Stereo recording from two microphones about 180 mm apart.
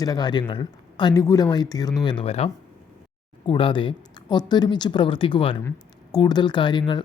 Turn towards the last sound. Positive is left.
turn(degrees=25)  # may be behind; listen again after turning